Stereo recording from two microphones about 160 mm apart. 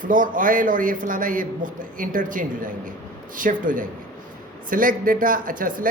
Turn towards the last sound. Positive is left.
turn(degrees=-60)  # may be behind; listen again after turning